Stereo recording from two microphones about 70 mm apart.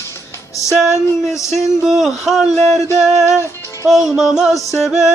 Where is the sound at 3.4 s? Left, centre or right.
Left.